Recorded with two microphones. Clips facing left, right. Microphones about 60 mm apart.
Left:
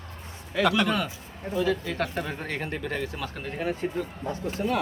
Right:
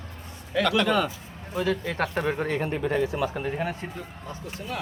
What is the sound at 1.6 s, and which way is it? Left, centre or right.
Speech, right.